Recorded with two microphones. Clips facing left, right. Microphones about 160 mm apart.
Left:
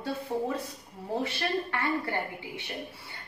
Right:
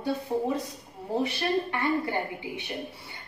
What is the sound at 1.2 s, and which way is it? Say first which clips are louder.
A woman's voice: right 5 dB; 15° right (ahead or behind).